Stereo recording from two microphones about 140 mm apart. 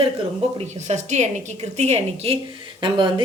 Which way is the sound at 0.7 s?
55° right (ahead or behind).